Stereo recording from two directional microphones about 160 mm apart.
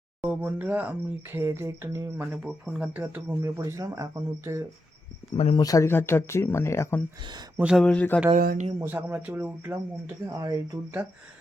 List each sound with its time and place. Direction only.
0.2 s speech: 10° right (ahead or behind)
2.3 s speech: 5° right (ahead or behind); by 4.6 s 20° right (ahead or behind)
5.4 s speech: 35° left (ahead or behind)
5.6 s speech: 20° left (ahead or behind)
7.5 s a man's voice: 5° right (ahead or behind)
7.9 s speech: 10° left (ahead or behind)
8.4 s speech: 65° right (ahead or behind)
8.8 s speech: 10° right (ahead or behind)